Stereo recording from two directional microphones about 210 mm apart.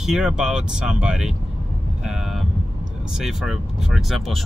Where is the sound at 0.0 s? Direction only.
Centre (ahead or behind).